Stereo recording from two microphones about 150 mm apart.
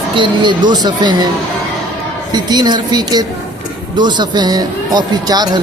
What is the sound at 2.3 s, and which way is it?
Speech, 30° right (ahead or behind).